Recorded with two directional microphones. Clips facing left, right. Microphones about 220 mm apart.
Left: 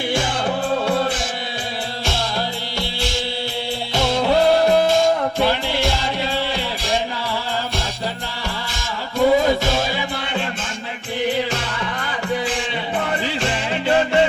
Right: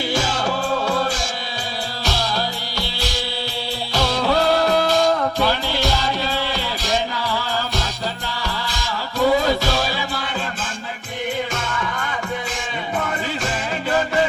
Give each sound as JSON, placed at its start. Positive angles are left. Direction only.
{"t": 0.1, "sound": "music", "side_deg": 25}
{"t": 2.7, "sound": "music", "side_deg": 25}
{"t": 9.1, "sound": "music", "side_deg": 20}
{"t": 13.2, "sound": "music", "side_deg": 30}